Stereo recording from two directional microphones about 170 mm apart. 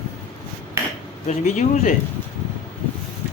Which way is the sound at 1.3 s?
45° left (ahead or behind).